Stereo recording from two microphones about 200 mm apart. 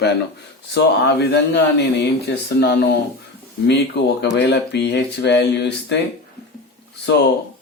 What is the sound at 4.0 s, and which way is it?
Speech, 60° left (ahead or behind).